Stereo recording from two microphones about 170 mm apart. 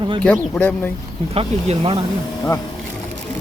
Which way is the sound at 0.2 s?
10° left (ahead or behind).